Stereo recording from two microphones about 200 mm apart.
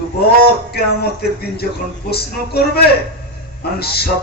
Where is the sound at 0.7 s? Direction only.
50° left (ahead or behind).